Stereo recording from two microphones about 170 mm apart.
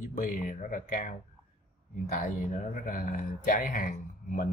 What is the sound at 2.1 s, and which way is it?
Speech, 50° left (ahead or behind).